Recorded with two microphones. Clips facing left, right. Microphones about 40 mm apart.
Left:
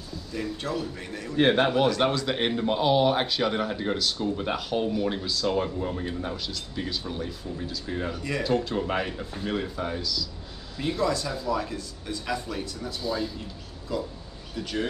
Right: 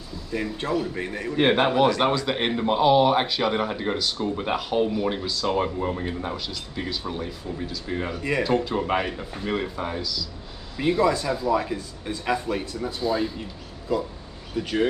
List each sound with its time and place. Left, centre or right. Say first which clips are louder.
0.3 s speech: right 5 dB; right
1.3 s speech: right 1 dB; centre
5.2 s speech: right 1 dB; centre
5.8 s speech: right 3 dB; right
6.3 s speech: right 2 dB; centre; by 8.5 s right
8.5 s speech: left 1 dB; centre
8.7 s speech: right 3 dB; right
14.6 s speech: right 6 dB; right